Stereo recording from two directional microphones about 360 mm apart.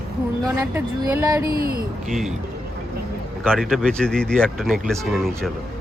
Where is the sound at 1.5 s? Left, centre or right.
Right.